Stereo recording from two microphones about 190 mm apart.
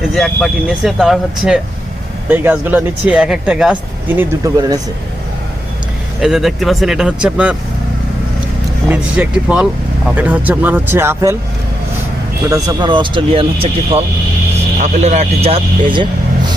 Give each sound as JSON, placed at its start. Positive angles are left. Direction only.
{"t": 0.1, "sound": "speech", "side_deg": 0}
{"t": 4.2, "sound": "speech", "side_deg": -20}
{"t": 6.1, "sound": "speech", "side_deg": 0}
{"t": 8.9, "sound": "speech", "side_deg": -5}
{"t": 12.5, "sound": "speech", "side_deg": -20}